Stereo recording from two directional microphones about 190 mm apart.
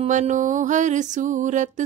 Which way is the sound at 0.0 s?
40° right (ahead or behind).